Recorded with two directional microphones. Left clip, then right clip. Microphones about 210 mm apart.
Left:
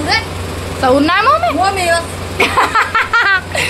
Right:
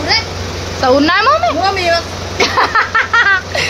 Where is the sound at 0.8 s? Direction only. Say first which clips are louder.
Right 1 dB; 5° right (ahead or behind).